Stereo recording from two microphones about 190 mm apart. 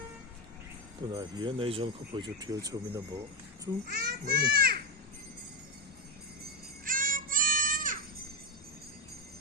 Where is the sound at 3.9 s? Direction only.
50° right (ahead or behind).